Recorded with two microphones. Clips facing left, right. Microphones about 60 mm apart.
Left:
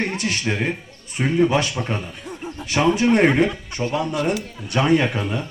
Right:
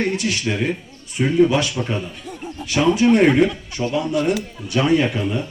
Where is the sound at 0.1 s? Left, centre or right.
Left.